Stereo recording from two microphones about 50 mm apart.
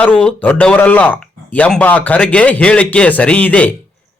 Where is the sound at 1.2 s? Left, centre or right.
Left.